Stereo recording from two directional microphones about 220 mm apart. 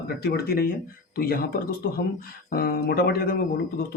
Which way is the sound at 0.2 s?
45° left (ahead or behind).